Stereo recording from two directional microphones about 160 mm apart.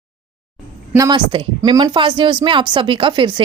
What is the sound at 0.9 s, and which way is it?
A woman's voice, 25° right (ahead or behind).